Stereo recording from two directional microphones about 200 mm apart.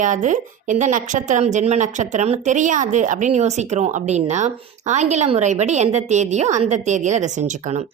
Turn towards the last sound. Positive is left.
turn(degrees=-35)  # may be behind; listen again after turning